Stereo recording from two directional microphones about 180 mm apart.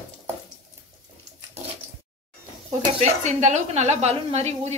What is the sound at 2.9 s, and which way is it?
Speech, 40° right (ahead or behind).